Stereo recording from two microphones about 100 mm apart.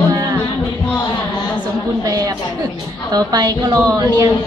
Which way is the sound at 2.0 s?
35° right (ahead or behind).